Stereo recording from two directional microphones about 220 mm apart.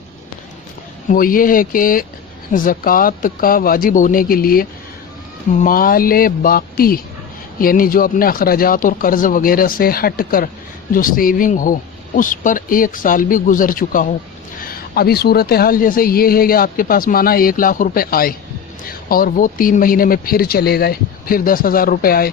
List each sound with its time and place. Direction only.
1.1 s a woman's voice: 40° left (ahead or behind)